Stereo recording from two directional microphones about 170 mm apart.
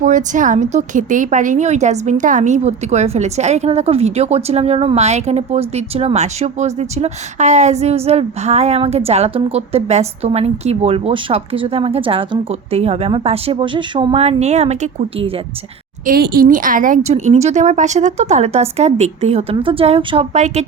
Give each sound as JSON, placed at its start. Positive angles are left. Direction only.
{"t": 0.0, "sound": "a woman's voice", "side_deg": -50}
{"t": 16.0, "sound": "a woman's voice", "side_deg": -65}
{"t": 20.3, "sound": "a woman's voice", "side_deg": -45}